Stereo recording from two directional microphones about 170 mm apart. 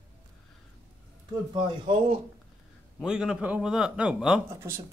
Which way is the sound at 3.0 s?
5° right (ahead or behind).